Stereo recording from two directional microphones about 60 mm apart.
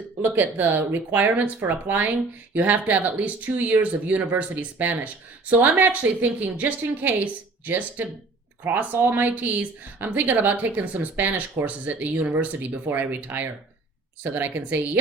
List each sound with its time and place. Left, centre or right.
0.2 s speech: right